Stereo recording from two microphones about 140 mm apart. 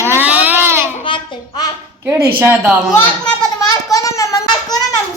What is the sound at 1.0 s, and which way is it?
Speech, 35° left (ahead or behind).